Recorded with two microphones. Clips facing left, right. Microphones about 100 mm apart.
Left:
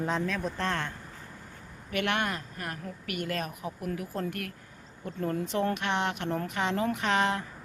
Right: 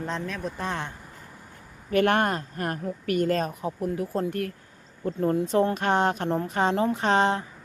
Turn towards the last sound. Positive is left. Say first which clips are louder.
# right 5 dB
turn(degrees=-30)  # may be behind; listen again after turning